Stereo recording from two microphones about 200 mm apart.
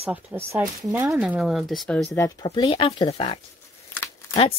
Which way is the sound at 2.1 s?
20° left (ahead or behind).